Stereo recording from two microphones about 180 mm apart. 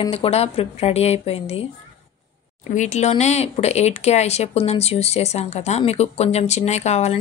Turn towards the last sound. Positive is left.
turn(degrees=35)  # may be behind; listen again after turning